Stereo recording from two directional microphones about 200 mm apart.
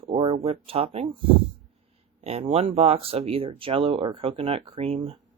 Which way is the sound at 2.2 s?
30° right (ahead or behind).